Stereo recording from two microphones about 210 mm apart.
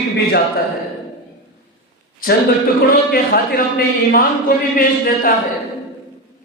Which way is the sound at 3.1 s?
45° left (ahead or behind).